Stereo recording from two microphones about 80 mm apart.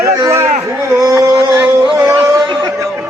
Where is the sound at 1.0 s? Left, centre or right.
Right.